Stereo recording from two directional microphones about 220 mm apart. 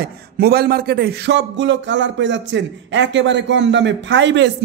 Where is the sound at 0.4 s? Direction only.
45° right (ahead or behind).